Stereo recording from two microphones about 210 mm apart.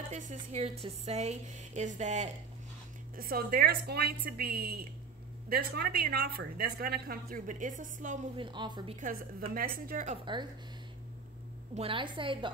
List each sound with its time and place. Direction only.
0.1 s speech: 35° right (ahead or behind)
3.2 s a woman's voice: 45° right (ahead or behind)
8.4 s a woman's voice: 20° right (ahead or behind)
9.5 s a woman's voice: 40° right (ahead or behind)
11.7 s a woman's voice: 25° right (ahead or behind)